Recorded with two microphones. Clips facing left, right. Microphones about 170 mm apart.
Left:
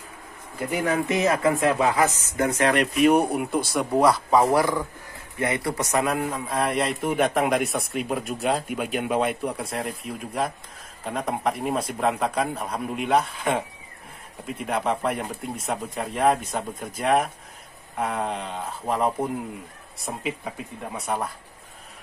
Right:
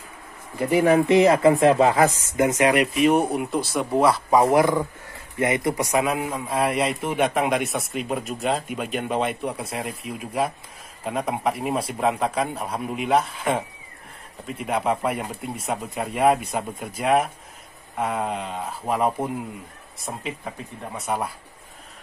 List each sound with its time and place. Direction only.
0.7 s speech: 15° right (ahead or behind)
0.9 s speech: 30° right (ahead or behind); by 4.2 s centre (ahead or behind)
4.5 s a man's voice: 20° right (ahead or behind)